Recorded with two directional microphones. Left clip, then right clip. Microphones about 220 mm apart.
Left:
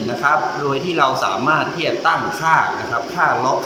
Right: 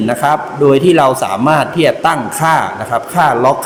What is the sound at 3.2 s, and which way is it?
Mantra, 45° right (ahead or behind).